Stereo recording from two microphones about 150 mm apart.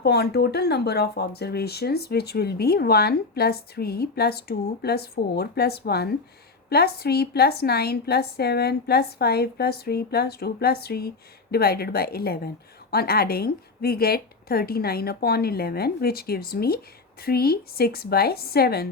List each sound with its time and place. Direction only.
0.0 s speech: 90° left